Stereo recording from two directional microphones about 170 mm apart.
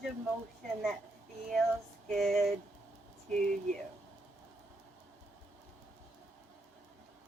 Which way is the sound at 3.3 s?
50° right (ahead or behind).